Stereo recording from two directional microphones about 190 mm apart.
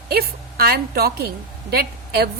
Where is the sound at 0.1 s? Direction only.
55° right (ahead or behind).